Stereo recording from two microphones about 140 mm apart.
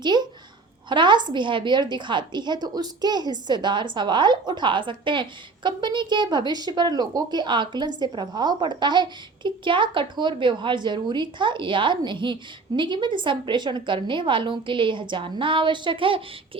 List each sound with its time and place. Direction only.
0.9 s a woman's voice: 35° right (ahead or behind)